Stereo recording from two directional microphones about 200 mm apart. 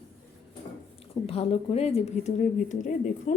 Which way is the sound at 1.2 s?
30° left (ahead or behind).